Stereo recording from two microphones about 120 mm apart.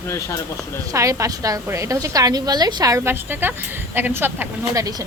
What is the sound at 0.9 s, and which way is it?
A woman's voice, 25° right (ahead or behind).